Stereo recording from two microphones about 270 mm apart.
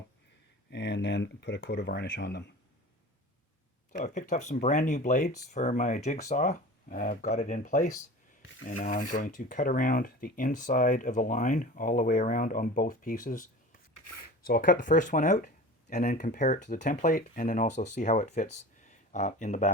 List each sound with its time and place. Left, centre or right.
0.7 s speech: left
3.9 s speech: left